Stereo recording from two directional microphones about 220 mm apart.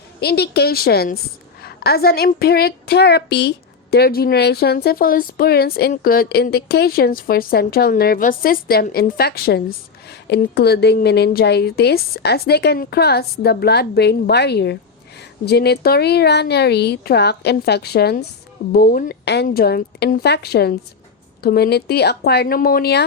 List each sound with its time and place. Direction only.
0.2 s speech: 45° left (ahead or behind)